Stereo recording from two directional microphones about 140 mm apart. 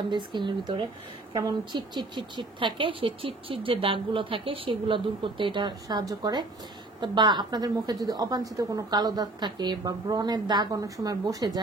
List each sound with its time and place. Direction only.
0.1 s a woman's voice: 35° right (ahead or behind)